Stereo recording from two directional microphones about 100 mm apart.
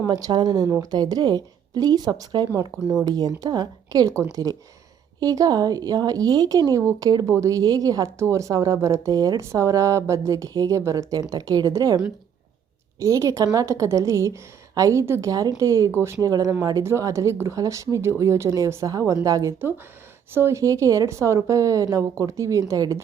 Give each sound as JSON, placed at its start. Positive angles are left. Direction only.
{"t": 0.1, "sound": "speech", "side_deg": -45}
{"t": 13.0, "sound": "speech", "side_deg": -35}
{"t": 15.3, "sound": "speech", "side_deg": -40}